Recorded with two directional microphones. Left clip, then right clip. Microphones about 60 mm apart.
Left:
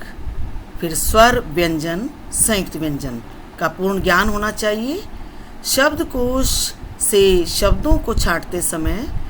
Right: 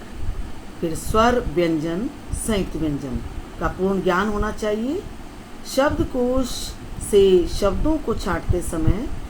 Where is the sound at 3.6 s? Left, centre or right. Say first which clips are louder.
Left 3 dB; left.